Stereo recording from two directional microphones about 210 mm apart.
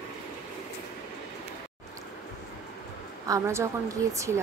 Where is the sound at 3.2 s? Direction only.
15° right (ahead or behind).